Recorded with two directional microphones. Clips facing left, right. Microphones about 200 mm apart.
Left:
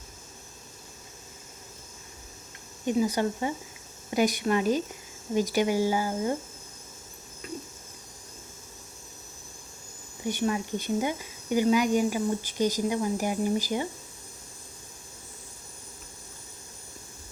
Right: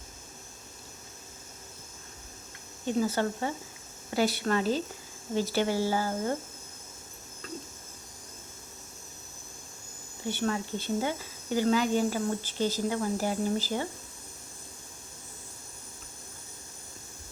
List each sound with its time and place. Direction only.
2.8 s speech: 15° left (ahead or behind)
7.4 s a sound: 10° left (ahead or behind)
10.2 s speech: 15° left (ahead or behind)